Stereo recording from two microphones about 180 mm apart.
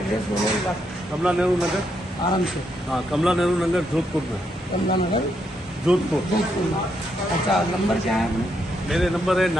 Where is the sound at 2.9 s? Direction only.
5° right (ahead or behind).